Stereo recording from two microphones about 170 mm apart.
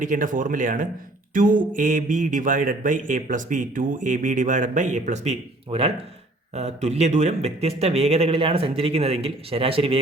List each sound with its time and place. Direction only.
0.0 s speech: 50° right (ahead or behind); by 10.0 s 35° right (ahead or behind)